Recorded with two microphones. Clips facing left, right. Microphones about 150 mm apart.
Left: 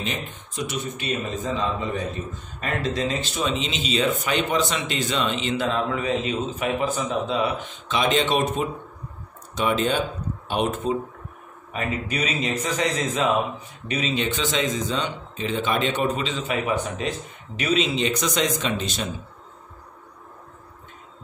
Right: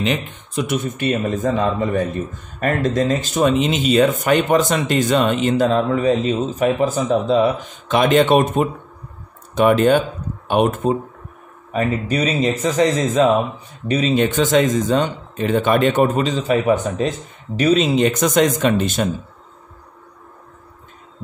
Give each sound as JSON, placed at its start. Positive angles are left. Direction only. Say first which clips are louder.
{"t": 0.0, "sound": "a man's voice", "louder": "right 9 dB", "side_deg": -70}
{"t": 7.9, "sound": "a man's voice", "louder": "right 8 dB", "side_deg": -55}
{"t": 11.7, "sound": "a man's voice", "louder": "right 8 dB", "side_deg": -35}